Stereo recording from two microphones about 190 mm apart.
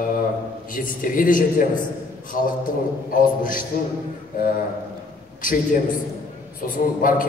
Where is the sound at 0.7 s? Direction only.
45° left (ahead or behind).